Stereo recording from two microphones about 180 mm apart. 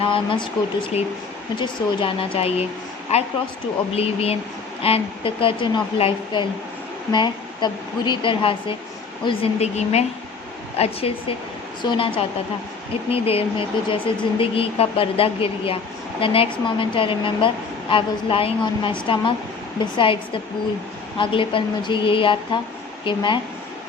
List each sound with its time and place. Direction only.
0.0 s a woman's voice: 30° left (ahead or behind)